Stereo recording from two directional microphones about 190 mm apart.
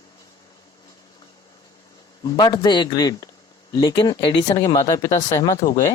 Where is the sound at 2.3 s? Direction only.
20° left (ahead or behind).